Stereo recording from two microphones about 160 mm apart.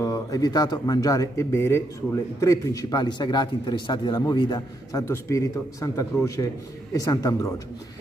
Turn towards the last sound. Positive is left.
turn(degrees=25)  # may be behind; listen again after turning